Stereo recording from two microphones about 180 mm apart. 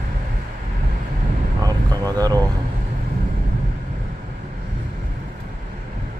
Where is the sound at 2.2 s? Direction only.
20° right (ahead or behind).